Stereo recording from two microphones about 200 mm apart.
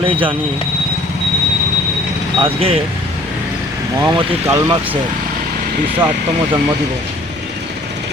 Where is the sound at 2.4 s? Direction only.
30° right (ahead or behind).